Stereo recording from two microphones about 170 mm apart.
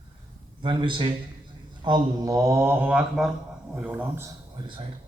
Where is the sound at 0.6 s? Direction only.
30° right (ahead or behind); by 4.2 s 10° right (ahead or behind).